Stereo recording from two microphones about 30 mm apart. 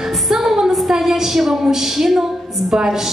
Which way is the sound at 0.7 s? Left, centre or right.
Centre.